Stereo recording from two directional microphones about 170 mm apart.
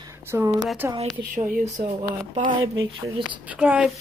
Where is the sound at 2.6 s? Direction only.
25° right (ahead or behind).